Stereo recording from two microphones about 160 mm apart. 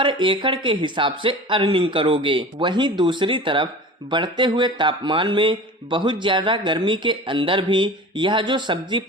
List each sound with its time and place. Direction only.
0.0 s speech: 30° right (ahead or behind)